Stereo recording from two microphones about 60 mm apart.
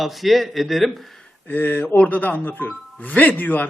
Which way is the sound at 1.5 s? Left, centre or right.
Left.